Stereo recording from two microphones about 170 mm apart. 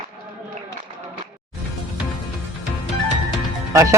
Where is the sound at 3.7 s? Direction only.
15° right (ahead or behind).